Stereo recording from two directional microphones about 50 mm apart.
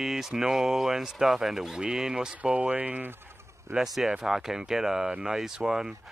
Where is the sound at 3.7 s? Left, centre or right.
Centre.